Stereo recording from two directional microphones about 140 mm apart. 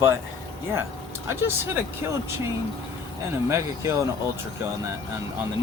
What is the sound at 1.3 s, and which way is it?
Speech, 15° right (ahead or behind).